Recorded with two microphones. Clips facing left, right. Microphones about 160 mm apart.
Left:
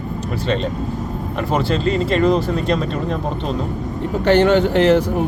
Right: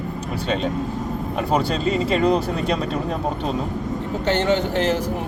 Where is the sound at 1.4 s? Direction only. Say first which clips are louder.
Left 2 dB; centre (ahead or behind).